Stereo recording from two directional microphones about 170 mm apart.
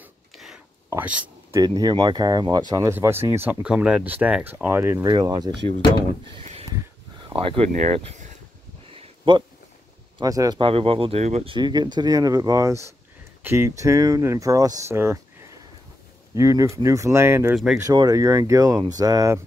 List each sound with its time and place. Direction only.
0.8 s a sound: 10° right (ahead or behind)
1.6 s speech: 25° right (ahead or behind)
5.0 s speech: 25° right (ahead or behind)
7.2 s speech: 35° right (ahead or behind)
8.9 s a sound: 30° right (ahead or behind)
10.1 s speech: 20° right (ahead or behind); by 11.5 s 40° right (ahead or behind)
11.5 s speech: 25° right (ahead or behind)
16.3 s speech: 20° right (ahead or behind)